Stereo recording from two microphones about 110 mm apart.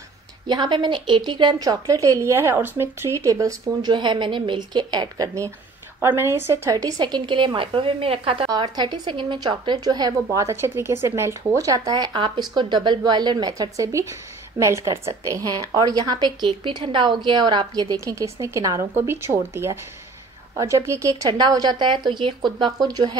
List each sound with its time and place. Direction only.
0.5 s a woman's voice: 45° right (ahead or behind)
3.9 s a woman's voice: 45° right (ahead or behind)
5.9 s a woman's voice: 20° right (ahead or behind); by 8.5 s 60° right (ahead or behind)
8.7 s a woman's voice: 40° right (ahead or behind)